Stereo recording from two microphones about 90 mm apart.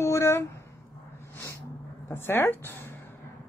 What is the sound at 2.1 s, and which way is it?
Speech, 25° left (ahead or behind).